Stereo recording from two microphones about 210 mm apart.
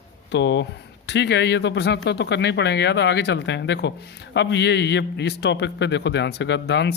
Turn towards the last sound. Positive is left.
turn(degrees=55)  # may be behind; listen again after turning